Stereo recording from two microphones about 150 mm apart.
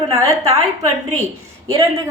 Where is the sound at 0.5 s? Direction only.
50° right (ahead or behind).